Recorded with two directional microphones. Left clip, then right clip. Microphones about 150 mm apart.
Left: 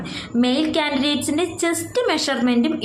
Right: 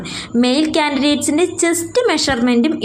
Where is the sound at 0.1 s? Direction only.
35° right (ahead or behind).